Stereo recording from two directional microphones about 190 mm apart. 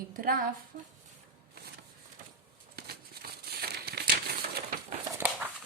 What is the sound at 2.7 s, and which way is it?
Crumpling, 55° right (ahead or behind).